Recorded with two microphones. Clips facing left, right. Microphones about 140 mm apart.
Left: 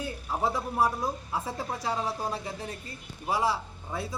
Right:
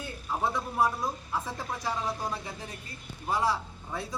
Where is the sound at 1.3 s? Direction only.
30° left (ahead or behind).